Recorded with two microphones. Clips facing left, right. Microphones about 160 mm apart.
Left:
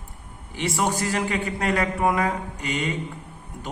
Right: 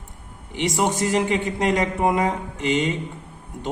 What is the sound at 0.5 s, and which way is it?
A man's voice, 20° right (ahead or behind).